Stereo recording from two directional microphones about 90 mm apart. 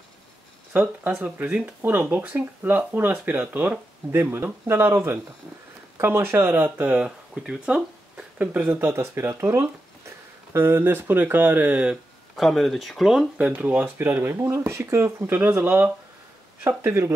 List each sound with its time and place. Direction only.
0.7 s speech: 20° right (ahead or behind)
12.4 s speech: centre (ahead or behind)
13.4 s speech: 15° right (ahead or behind)